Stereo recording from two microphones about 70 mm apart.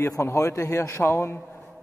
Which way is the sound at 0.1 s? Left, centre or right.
Left.